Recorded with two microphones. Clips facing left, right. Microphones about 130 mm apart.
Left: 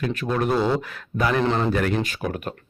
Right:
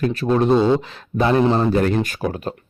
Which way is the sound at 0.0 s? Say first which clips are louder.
Right 6 dB; 35° right (ahead or behind).